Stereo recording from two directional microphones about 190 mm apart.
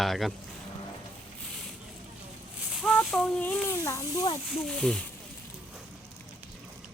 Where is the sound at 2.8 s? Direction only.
5° left (ahead or behind).